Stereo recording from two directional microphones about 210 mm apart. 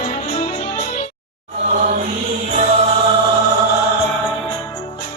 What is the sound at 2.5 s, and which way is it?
Music, 30° right (ahead or behind).